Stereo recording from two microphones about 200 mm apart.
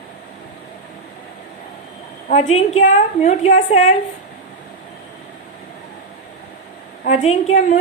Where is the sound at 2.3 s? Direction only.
30° left (ahead or behind).